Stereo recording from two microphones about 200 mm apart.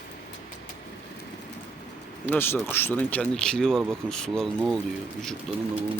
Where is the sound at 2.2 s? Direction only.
10° left (ahead or behind).